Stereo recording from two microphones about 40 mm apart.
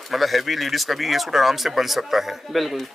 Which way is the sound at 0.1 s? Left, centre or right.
Centre.